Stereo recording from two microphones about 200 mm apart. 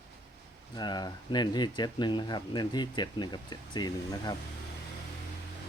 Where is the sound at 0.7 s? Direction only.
20° left (ahead or behind).